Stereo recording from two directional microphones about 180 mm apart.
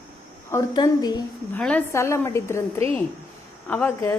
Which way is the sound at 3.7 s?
10° left (ahead or behind).